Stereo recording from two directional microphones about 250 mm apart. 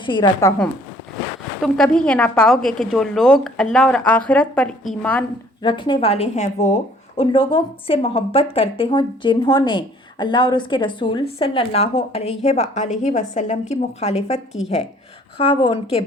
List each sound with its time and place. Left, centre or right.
0.0 s a woman's voice: centre
5.6 s speech: centre